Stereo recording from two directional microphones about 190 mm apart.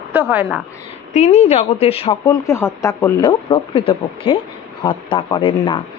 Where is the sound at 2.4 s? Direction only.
15° left (ahead or behind).